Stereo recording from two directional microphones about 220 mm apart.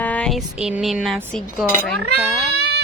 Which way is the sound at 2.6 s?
50° right (ahead or behind).